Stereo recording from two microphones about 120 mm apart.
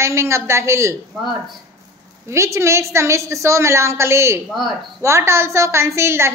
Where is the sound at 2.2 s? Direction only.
25° right (ahead or behind).